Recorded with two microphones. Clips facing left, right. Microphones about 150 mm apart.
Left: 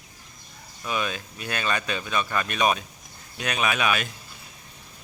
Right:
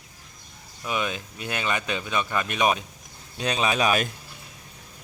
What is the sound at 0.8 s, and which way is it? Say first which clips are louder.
Speech: right 1 dB; 20° right (ahead or behind).